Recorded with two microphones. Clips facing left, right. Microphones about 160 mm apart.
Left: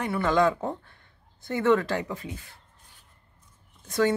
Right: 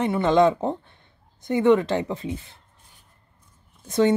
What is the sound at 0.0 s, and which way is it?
Speech, 25° right (ahead or behind).